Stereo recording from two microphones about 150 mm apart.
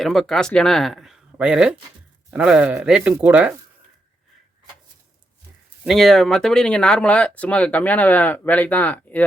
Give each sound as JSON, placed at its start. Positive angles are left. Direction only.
{"t": 0.0, "sound": "speech", "side_deg": 0}
{"t": 5.8, "sound": "speech", "side_deg": 0}